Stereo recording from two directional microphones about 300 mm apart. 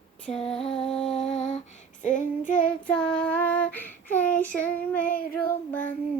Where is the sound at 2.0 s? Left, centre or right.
Left.